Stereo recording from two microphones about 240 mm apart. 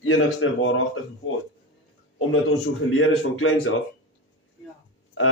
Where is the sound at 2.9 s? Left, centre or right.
Left.